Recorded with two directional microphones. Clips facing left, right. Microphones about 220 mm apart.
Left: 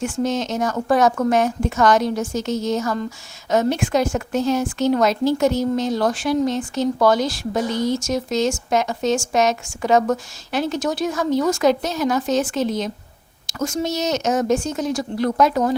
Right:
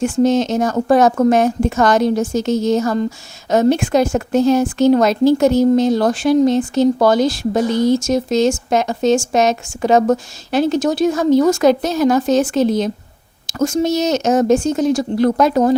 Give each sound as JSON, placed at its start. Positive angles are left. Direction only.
{"t": 0.0, "sound": "a woman's voice", "side_deg": -30}